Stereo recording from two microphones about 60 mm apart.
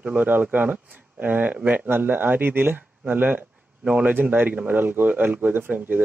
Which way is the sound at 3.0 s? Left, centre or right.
Right.